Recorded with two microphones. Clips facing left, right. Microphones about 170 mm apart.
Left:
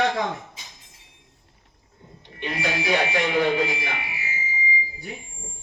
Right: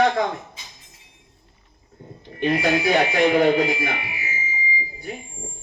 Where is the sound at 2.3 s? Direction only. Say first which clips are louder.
Right 8 dB; 40° right (ahead or behind).